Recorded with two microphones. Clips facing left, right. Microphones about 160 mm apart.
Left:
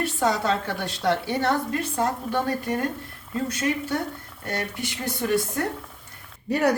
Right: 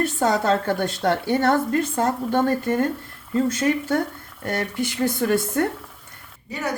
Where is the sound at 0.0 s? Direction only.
50° right (ahead or behind).